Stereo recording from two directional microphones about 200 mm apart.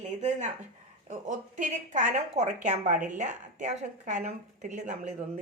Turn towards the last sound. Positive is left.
turn(degrees=-35)  # may be behind; listen again after turning